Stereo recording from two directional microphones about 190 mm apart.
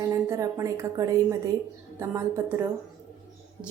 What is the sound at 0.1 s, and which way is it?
A woman's voice, 15° right (ahead or behind).